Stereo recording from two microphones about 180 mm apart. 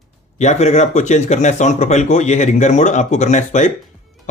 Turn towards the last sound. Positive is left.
turn(degrees=40)  # may be behind; listen again after turning